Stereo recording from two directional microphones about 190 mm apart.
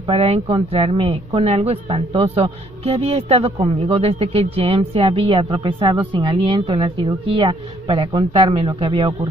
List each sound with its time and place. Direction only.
0.0 s speech: 30° right (ahead or behind)